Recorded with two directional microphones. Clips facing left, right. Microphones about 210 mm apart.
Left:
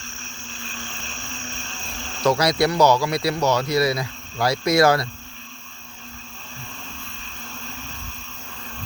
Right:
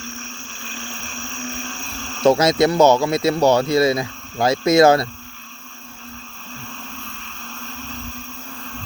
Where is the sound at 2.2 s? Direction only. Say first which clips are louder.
Right 5 dB; 25° right (ahead or behind).